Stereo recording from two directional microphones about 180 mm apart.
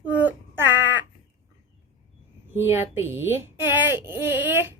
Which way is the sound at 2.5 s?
10° right (ahead or behind).